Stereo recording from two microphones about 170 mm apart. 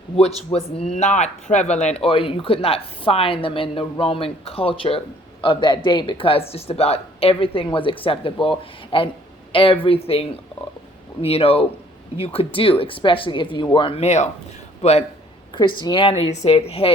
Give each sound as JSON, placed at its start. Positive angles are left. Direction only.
{"t": 0.2, "sound": "a woman's voice", "side_deg": 35}
{"t": 2.0, "sound": "a woman's voice", "side_deg": 30}
{"t": 15.5, "sound": "speech", "side_deg": 25}
{"t": 16.3, "sound": "a woman's voice", "side_deg": 40}